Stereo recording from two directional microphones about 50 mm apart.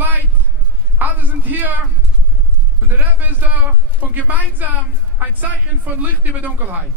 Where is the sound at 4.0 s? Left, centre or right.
Right.